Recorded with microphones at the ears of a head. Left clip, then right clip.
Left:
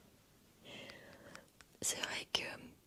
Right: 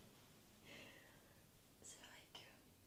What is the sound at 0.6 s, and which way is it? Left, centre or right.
Whispering, left.